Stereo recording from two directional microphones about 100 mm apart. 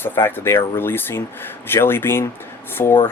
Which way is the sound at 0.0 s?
20° left (ahead or behind).